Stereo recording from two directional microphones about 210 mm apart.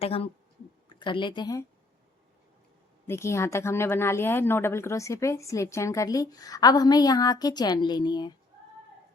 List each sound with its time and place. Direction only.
0.0 s speech: 25° left (ahead or behind)
3.1 s speech: 15° left (ahead or behind)